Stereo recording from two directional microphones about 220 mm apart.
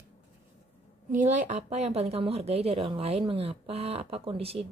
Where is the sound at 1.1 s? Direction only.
35° right (ahead or behind).